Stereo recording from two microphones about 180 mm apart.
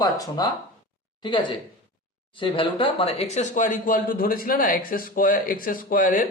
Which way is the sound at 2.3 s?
30° left (ahead or behind).